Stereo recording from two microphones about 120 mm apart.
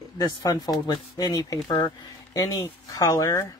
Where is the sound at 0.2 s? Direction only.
40° left (ahead or behind).